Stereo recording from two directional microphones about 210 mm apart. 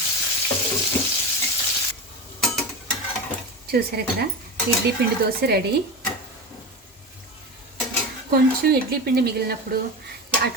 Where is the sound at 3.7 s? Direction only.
50° right (ahead or behind).